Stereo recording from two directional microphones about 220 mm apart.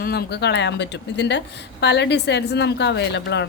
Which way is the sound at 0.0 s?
45° left (ahead or behind).